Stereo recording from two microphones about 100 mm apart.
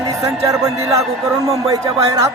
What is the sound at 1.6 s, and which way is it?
Speech, 30° right (ahead or behind).